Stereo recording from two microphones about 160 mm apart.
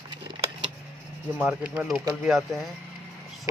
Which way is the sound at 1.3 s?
10° right (ahead or behind).